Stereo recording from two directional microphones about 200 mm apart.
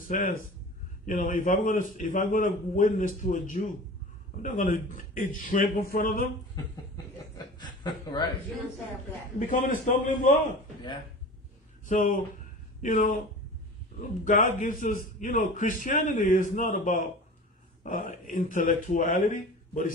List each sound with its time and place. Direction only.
0.1 s a man's voice: 40° left (ahead or behind)
7.3 s chuckle: 20° left (ahead or behind)
9.5 s a man's voice: 45° left (ahead or behind)
11.8 s a sound: 40° left (ahead or behind)
12.8 s a man's voice: 40° left (ahead or behind)
14.2 s a man's voice: 40° left (ahead or behind)